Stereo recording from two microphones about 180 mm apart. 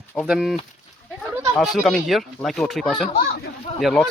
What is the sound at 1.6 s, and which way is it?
Speech, centre (ahead or behind).